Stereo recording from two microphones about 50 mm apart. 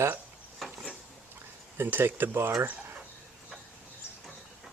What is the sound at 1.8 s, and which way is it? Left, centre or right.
Speech, right.